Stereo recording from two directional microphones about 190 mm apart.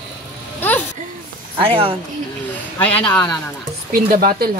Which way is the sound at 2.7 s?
10° left (ahead or behind).